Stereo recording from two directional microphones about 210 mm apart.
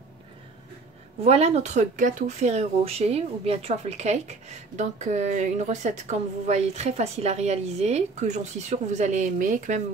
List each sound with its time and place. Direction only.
1.2 s speech: 30° right (ahead or behind)